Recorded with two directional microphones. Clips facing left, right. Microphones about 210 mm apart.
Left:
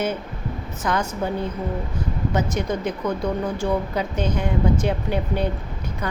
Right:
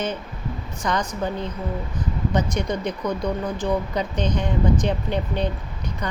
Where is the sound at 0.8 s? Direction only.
5° left (ahead or behind).